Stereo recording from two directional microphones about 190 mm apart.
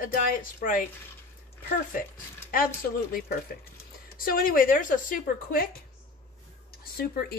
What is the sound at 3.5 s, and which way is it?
Speech, 55° left (ahead or behind).